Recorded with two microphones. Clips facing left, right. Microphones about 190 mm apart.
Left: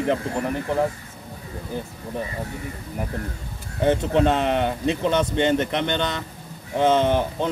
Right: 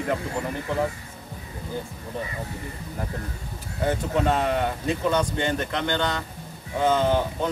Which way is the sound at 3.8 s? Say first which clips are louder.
Left 5 dB; 25° left (ahead or behind).